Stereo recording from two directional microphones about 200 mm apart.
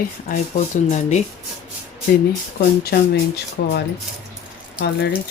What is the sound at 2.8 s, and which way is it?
Speech, 55° left (ahead or behind).